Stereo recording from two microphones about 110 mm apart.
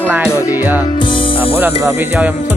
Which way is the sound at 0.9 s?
50° left (ahead or behind).